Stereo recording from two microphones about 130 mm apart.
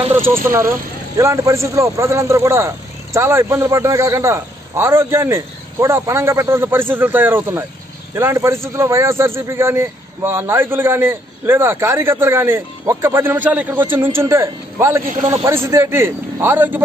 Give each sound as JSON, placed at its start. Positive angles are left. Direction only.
{"t": 0.3, "sound": "speech", "side_deg": -20}